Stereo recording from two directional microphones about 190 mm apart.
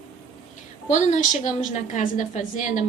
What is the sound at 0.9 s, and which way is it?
A woman's voice, 40° left (ahead or behind).